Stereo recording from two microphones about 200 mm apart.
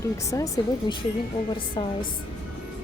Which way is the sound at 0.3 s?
15° left (ahead or behind).